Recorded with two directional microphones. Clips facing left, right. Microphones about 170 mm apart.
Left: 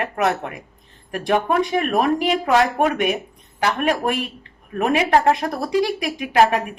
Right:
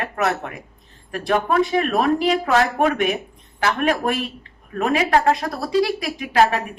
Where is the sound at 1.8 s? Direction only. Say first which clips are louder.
Even; 15° left (ahead or behind).